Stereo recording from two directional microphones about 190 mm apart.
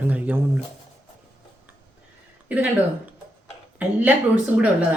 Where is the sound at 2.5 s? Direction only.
10° right (ahead or behind).